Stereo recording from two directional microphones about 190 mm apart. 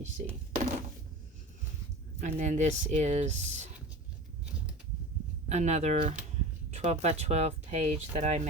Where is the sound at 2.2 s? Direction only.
40° right (ahead or behind).